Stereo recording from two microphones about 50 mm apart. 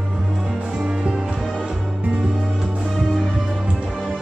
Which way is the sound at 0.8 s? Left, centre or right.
Centre.